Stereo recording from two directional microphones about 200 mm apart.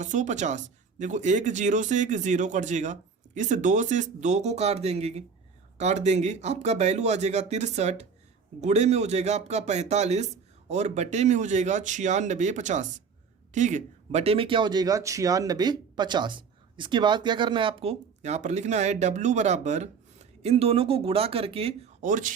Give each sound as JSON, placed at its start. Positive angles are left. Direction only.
{"t": 0.0, "sound": "speech", "side_deg": -35}